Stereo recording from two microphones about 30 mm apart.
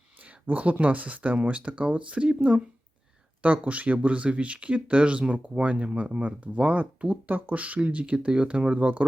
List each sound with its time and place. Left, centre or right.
0.2 s speech: right
3.4 s speech: right
6.2 s speech: right
7.8 s speech: right